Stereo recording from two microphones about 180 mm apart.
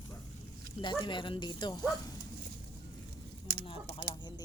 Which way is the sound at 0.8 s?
25° left (ahead or behind).